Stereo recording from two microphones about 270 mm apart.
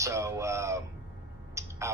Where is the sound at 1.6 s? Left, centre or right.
Centre.